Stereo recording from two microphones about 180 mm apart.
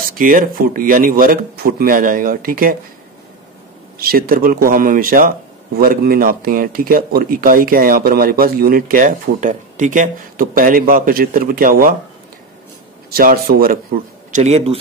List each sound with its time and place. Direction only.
0.0 s speech: 50° right (ahead or behind)
4.0 s speech: 55° right (ahead or behind)
13.1 s speech: 55° right (ahead or behind)
14.3 s speech: 35° right (ahead or behind)